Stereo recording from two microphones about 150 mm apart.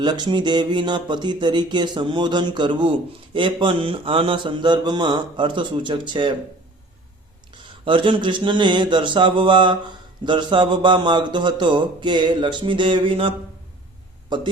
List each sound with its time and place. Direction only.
0.0 s speech: 30° right (ahead or behind)
7.9 s speech: 35° right (ahead or behind)